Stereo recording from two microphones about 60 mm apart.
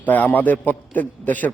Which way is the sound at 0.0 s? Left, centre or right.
Left.